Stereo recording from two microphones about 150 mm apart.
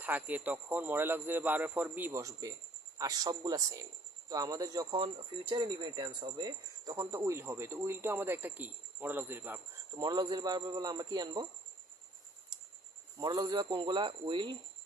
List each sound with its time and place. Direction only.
0.0 s a man's voice: 10° right (ahead or behind)
10.0 s a man's voice: 30° right (ahead or behind)
13.1 s speech: 25° right (ahead or behind)